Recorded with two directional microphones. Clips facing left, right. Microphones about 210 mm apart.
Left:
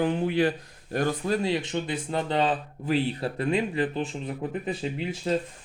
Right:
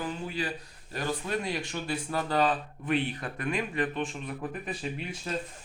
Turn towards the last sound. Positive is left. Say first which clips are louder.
# left 6 dB
turn(degrees=25)  # may be behind; listen again after turning